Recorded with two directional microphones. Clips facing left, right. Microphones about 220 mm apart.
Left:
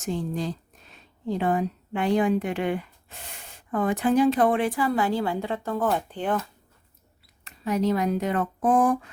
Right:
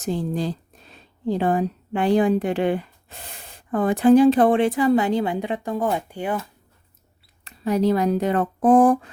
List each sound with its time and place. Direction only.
0.0 s a woman's voice: 35° right (ahead or behind); by 6.4 s 10° right (ahead or behind)
7.4 s speech: 35° right (ahead or behind)